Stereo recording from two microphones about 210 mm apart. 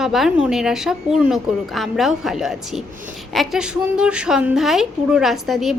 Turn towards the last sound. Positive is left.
turn(degrees=0)  # may be behind; listen again after turning